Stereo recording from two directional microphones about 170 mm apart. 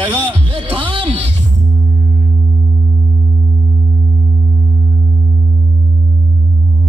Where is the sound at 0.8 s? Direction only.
30° right (ahead or behind).